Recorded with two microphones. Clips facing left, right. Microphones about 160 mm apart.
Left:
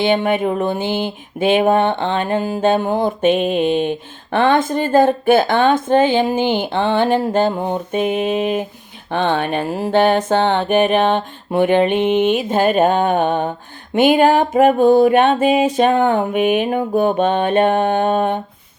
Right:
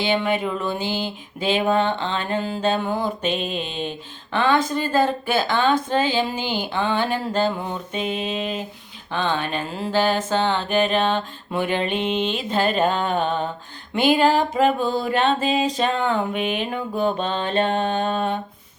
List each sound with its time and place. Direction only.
0.0 s music: 50° left (ahead or behind)
2.6 s mantra: 50° left (ahead or behind)
13.9 s music: 50° left (ahead or behind)
17.6 s mantra: 60° left (ahead or behind)